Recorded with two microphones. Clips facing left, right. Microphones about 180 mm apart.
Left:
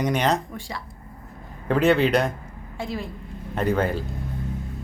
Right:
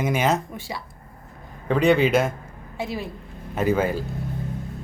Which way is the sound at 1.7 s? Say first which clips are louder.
Right 1 dB; centre (ahead or behind).